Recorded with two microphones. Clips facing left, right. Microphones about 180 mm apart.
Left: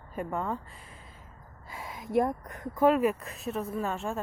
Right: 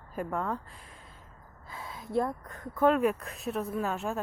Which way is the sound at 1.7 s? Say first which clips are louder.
Left 3 dB; 15° left (ahead or behind).